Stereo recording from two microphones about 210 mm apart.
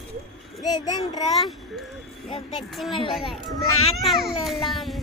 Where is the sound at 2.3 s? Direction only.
25° left (ahead or behind).